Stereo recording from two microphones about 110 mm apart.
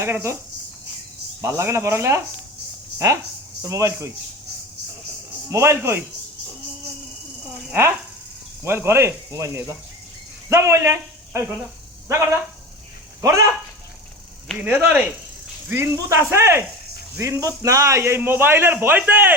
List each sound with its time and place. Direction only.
0.0 s a man's voice: 25° right (ahead or behind)
1.4 s a man's voice: 25° right (ahead or behind)
3.6 s a man's voice: 25° right (ahead or behind)
5.5 s a man's voice: 25° right (ahead or behind)
8.6 s a man's voice: 20° right (ahead or behind)
14.6 s a man's voice: 15° right (ahead or behind)